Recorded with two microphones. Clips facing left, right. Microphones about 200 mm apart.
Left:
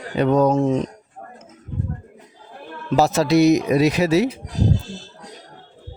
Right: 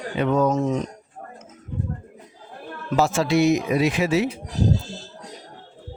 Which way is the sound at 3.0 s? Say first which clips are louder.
Left 4 dB; 40° left (ahead or behind).